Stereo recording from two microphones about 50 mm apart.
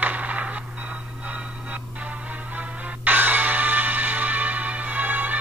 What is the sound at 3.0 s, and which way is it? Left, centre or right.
Music, right.